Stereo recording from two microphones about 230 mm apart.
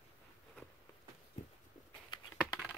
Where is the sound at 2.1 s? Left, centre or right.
Centre.